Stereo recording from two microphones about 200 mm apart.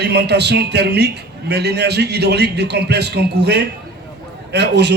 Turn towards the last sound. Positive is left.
turn(degrees=-55)  # may be behind; listen again after turning